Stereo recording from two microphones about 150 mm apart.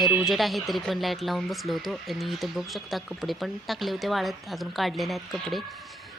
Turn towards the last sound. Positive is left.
turn(degrees=0)  # may be behind; listen again after turning